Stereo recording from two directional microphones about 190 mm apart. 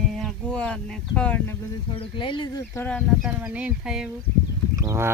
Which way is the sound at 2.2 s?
25° left (ahead or behind).